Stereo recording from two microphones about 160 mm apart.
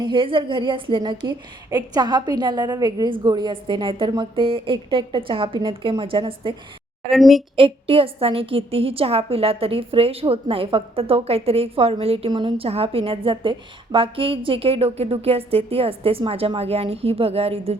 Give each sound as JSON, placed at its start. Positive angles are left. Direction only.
{"t": 0.0, "sound": "a woman's voice", "side_deg": -30}
{"t": 7.1, "sound": "a woman's voice", "side_deg": 0}
{"t": 7.5, "sound": "a woman's voice", "side_deg": -35}